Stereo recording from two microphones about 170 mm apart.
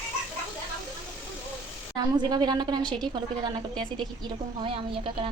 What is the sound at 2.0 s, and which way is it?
A woman's voice, 25° right (ahead or behind).